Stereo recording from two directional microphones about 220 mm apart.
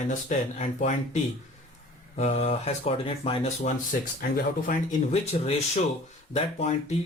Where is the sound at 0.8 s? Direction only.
35° left (ahead or behind).